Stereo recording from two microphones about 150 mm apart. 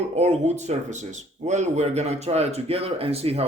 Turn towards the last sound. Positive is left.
turn(degrees=-40)  # may be behind; listen again after turning